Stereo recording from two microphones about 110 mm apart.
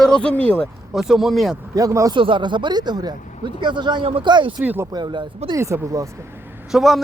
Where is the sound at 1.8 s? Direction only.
30° right (ahead or behind).